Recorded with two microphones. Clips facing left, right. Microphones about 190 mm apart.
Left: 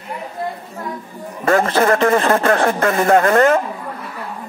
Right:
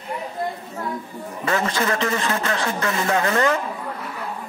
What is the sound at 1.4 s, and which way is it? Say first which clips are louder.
Speech: left 8 dB; 50° left (ahead or behind).